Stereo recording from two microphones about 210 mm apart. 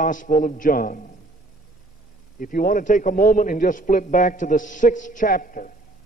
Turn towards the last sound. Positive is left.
turn(degrees=40)  # may be behind; listen again after turning